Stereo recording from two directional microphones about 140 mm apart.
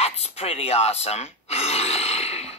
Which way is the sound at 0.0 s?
45° left (ahead or behind).